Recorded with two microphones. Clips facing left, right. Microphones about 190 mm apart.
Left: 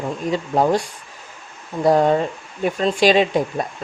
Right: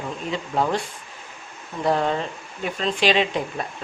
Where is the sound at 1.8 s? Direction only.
40° left (ahead or behind).